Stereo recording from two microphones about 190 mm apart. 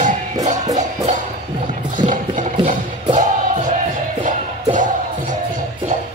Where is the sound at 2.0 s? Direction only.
40° right (ahead or behind).